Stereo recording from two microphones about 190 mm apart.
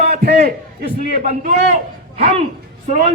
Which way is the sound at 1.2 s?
40° right (ahead or behind).